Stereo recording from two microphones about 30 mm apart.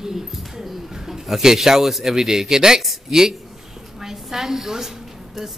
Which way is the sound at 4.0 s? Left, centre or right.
Centre.